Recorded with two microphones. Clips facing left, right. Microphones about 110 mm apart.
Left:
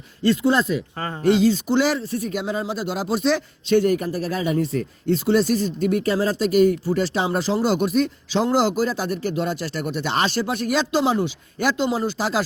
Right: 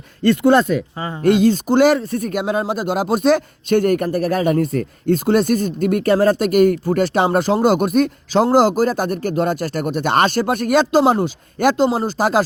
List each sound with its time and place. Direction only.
0.2 s speech: 55° right (ahead or behind)
0.9 s speech: 15° right (ahead or behind)
1.2 s speech: 55° right (ahead or behind)